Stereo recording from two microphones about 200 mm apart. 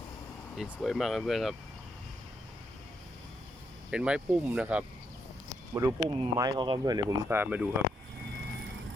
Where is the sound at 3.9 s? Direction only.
5° right (ahead or behind).